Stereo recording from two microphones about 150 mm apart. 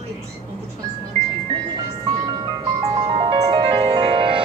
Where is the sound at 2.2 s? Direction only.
25° right (ahead or behind).